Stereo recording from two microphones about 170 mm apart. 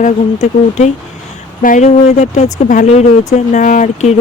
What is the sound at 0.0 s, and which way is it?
Speech, 45° left (ahead or behind).